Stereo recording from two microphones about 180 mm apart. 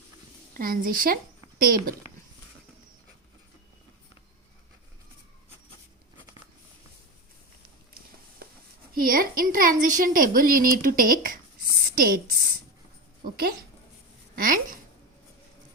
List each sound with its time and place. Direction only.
0.5 s speech: 55° right (ahead or behind)
9.0 s a woman's voice: 50° right (ahead or behind)
14.3 s a woman's voice: 50° right (ahead or behind)